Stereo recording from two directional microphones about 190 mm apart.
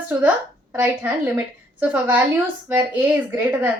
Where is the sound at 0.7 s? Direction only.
10° right (ahead or behind).